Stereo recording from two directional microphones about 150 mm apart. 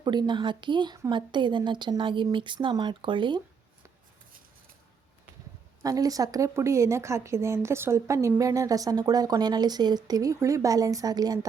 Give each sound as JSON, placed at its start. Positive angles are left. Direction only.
{"t": 0.0, "sound": "speech", "side_deg": -30}
{"t": 5.8, "sound": "a woman's voice", "side_deg": -25}